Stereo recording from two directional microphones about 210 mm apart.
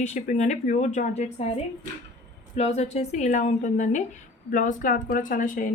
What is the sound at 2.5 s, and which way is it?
A woman's voice, 30° left (ahead or behind).